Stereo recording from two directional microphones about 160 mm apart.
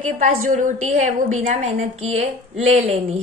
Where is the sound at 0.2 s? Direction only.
50° right (ahead or behind).